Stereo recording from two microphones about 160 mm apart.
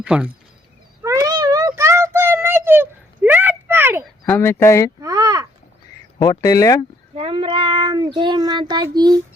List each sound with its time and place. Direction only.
0.0 s speech: 5° right (ahead or behind)
1.0 s a sound: 20° right (ahead or behind)
4.3 s speech: 15° left (ahead or behind)
4.9 s a sound: 20° right (ahead or behind)
6.1 s speech: 25° left (ahead or behind)
7.2 s speech: 35° right (ahead or behind)